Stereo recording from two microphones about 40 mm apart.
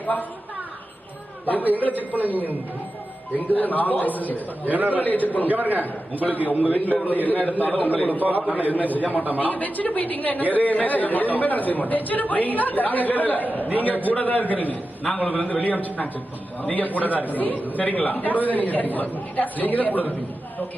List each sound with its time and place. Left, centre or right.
0.0 s a woman's voice: left
1.8 s speech: left
2.1 s a man's voice: right
3.3 s speech: left
4.7 s a man's voice: right
4.9 s speech: left
5.5 s a man's voice: right
6.2 s speech: left
8.2 s a man's voice: right
8.7 s speech: left
9.1 s a man's voice: right
9.4 s speech: left